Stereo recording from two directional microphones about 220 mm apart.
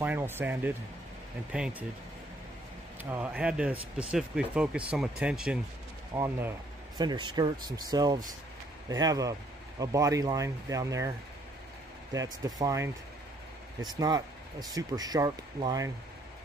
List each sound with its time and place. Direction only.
0.0 s speech: 10° right (ahead or behind)
3.0 s speech: 10° right (ahead or behind)
12.1 s speech: 15° right (ahead or behind)